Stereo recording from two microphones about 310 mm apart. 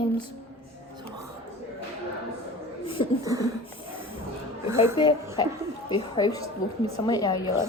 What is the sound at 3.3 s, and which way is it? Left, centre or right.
Speech, centre.